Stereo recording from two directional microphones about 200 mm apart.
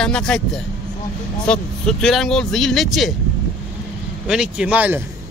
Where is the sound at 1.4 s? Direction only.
5° left (ahead or behind).